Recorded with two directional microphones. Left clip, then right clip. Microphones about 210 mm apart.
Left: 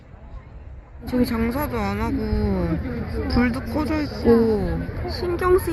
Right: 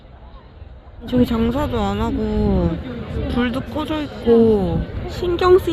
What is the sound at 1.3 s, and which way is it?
Speech, 20° right (ahead or behind).